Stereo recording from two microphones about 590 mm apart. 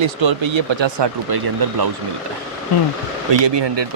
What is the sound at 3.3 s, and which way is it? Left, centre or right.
Speech, right.